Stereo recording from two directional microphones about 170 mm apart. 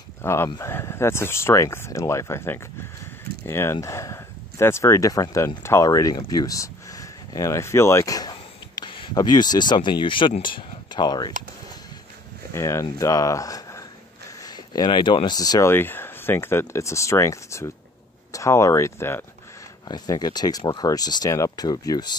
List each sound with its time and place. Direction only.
0.2 s speech: 15° left (ahead or behind)
12.5 s speech: 15° left (ahead or behind)